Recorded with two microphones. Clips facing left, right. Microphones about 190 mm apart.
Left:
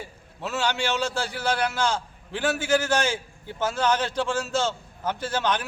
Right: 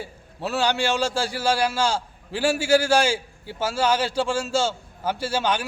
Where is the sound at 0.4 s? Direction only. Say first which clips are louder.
Right 4 dB; 35° right (ahead or behind).